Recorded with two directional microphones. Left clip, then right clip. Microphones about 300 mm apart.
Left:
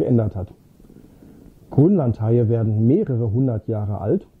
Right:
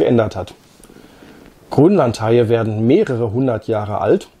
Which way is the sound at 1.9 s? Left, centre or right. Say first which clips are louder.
Right 7 dB; centre.